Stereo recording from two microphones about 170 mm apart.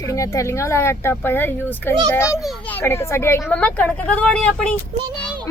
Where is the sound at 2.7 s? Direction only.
15° left (ahead or behind).